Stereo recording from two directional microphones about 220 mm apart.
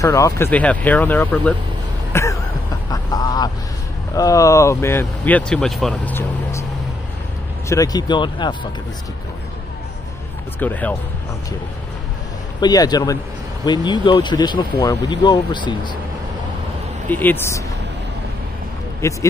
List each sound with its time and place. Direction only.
0.0 s speech: 15° left (ahead or behind)
2.9 s vehicle: 15° left (ahead or behind)
4.1 s speech: 15° left (ahead or behind)
7.6 s speech: 15° left (ahead or behind)
10.6 s speech: 5° left (ahead or behind)
12.5 s speech: 20° left (ahead or behind)
17.1 s speech: 10° left (ahead or behind)
19.0 s speech: 15° left (ahead or behind)